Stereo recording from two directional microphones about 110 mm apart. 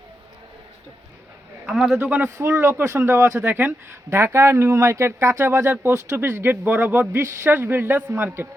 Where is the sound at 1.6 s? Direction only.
5° right (ahead or behind).